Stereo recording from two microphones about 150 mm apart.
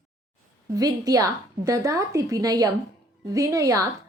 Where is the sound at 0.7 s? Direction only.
25° right (ahead or behind).